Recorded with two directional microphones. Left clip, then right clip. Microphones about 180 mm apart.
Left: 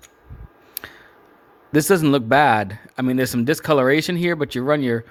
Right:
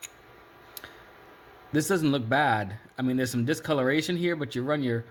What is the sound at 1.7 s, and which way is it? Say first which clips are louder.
Speech: left 9 dB; 55° left (ahead or behind).